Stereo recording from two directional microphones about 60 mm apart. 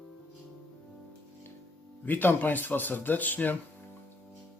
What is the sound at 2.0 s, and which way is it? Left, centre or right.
Speech, left.